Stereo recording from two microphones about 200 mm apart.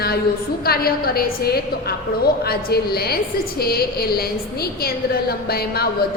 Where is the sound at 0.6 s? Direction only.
50° left (ahead or behind).